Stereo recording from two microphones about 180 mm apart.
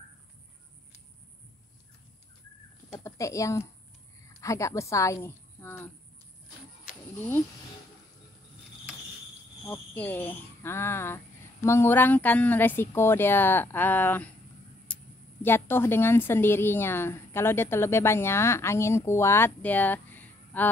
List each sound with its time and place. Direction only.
2.9 s speech: 15° left (ahead or behind)
7.2 s a woman's voice: 10° left (ahead or behind)
9.7 s a woman's voice: 10° left (ahead or behind)
14.9 s a sound: 5° left (ahead or behind)
15.4 s a woman's voice: 10° left (ahead or behind)